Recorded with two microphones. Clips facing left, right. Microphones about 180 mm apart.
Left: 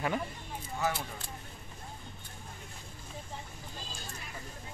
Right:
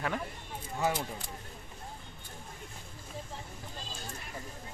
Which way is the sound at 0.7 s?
20° right (ahead or behind).